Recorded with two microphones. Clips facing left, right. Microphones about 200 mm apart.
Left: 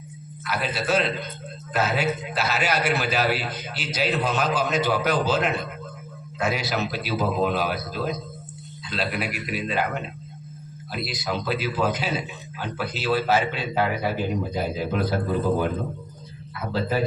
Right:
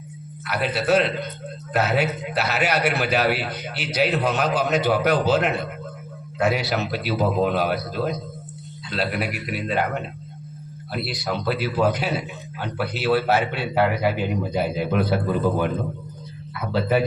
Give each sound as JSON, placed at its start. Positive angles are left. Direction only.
{"t": 0.4, "sound": "a man's voice", "side_deg": -65}
{"t": 16.6, "sound": "a man's voice", "side_deg": -65}